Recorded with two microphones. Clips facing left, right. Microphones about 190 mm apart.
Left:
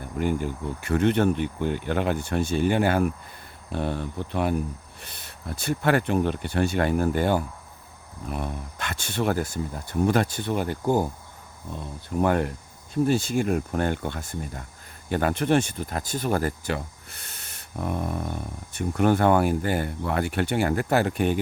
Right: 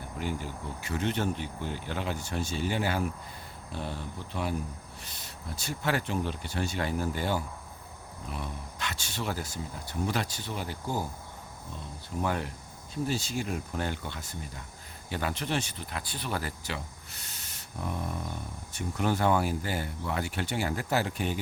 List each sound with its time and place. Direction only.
0.2 s speech: 55° left (ahead or behind)
12.2 s speech: 55° left (ahead or behind)